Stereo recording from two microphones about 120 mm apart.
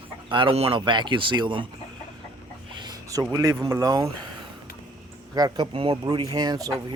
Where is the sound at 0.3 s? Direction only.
45° right (ahead or behind).